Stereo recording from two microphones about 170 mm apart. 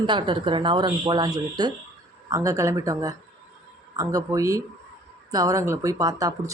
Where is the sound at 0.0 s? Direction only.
30° right (ahead or behind).